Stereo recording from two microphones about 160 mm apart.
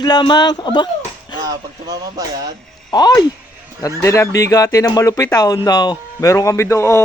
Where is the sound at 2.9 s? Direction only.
25° left (ahead or behind).